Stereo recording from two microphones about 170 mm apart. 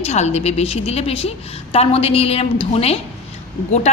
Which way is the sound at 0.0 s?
40° left (ahead or behind).